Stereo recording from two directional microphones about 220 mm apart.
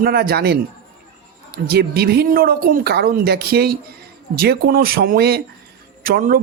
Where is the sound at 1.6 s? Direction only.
45° right (ahead or behind).